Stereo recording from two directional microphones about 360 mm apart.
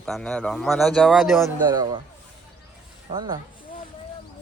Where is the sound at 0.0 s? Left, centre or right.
Centre.